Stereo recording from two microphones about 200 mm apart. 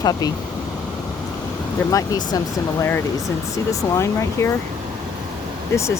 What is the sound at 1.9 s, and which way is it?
Speech, 15° left (ahead or behind).